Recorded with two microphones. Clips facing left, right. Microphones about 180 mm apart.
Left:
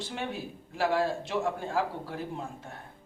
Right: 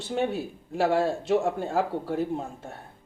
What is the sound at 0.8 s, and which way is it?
A woman's voice, 50° right (ahead or behind).